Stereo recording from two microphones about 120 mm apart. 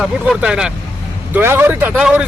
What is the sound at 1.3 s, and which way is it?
Speech, 20° right (ahead or behind).